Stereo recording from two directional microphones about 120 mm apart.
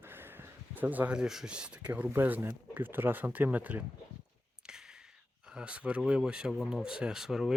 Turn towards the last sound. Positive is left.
turn(degrees=-5)  # may be behind; listen again after turning